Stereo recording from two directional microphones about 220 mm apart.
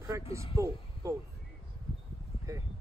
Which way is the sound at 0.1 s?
10° right (ahead or behind).